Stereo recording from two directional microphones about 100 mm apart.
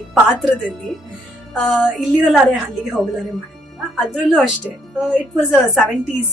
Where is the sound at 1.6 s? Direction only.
Centre (ahead or behind).